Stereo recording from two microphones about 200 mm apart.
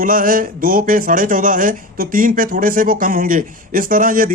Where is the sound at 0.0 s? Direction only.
45° right (ahead or behind).